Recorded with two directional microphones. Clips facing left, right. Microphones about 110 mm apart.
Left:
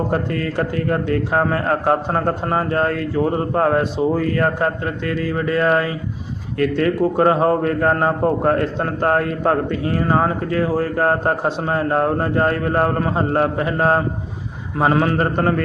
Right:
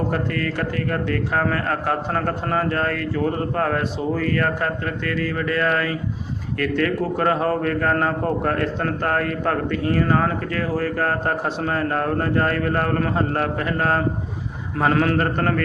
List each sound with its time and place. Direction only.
0.1 s a man's voice: 25° left (ahead or behind)